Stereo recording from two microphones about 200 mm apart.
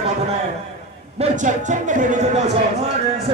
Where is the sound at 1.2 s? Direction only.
40° right (ahead or behind).